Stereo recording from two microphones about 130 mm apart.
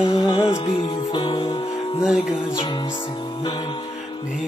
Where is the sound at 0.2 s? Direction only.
40° left (ahead or behind).